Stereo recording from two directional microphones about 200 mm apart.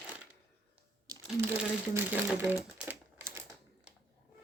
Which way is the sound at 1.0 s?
20° right (ahead or behind).